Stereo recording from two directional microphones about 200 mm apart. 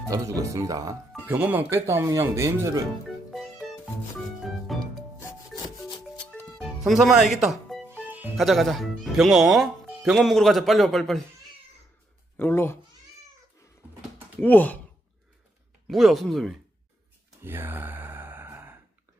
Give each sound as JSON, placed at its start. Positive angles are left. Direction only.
{"t": 0.1, "sound": "speech", "side_deg": -15}
{"t": 4.4, "sound": "music", "side_deg": 0}
{"t": 6.3, "sound": "music", "side_deg": 0}
{"t": 8.0, "sound": "speech", "side_deg": -10}
{"t": 12.4, "sound": "speech", "side_deg": 10}
{"t": 13.8, "sound": "a sound", "side_deg": -10}
{"t": 14.4, "sound": "speech", "side_deg": 10}
{"t": 15.9, "sound": "speech", "side_deg": 0}
{"t": 17.4, "sound": "sigh", "side_deg": -10}